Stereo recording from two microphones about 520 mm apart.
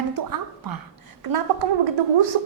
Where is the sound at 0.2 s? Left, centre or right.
Right.